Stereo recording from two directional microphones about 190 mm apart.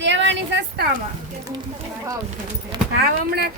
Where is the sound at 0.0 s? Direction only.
70° right (ahead or behind).